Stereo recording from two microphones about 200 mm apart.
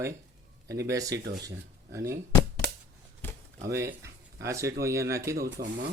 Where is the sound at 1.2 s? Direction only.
55° right (ahead or behind).